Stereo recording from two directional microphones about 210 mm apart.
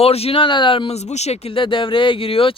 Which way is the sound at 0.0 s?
30° left (ahead or behind).